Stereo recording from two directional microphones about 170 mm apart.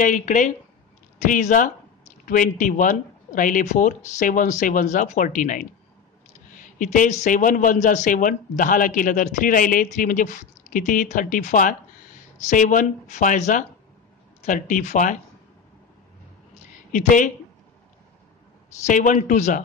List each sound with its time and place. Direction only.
0.0 s speech: 45° left (ahead or behind)
16.9 s speech: 50° left (ahead or behind)
18.9 s speech: 45° left (ahead or behind)